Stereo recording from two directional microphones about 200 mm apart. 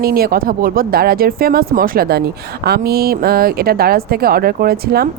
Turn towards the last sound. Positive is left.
turn(degrees=-50)  # may be behind; listen again after turning